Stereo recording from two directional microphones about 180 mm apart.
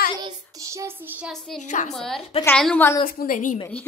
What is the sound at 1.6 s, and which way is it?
Speech, 40° left (ahead or behind).